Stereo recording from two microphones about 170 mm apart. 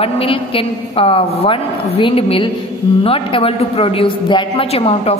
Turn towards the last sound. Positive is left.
turn(degrees=35)  # may be behind; listen again after turning